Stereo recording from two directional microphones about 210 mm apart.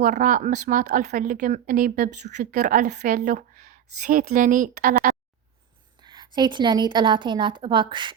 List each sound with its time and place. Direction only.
0.0 s a woman's voice: 40° right (ahead or behind)
6.0 s a woman's voice: 20° right (ahead or behind)